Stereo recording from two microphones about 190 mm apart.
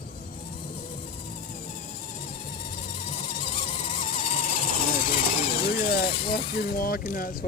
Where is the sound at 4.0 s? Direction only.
45° left (ahead or behind).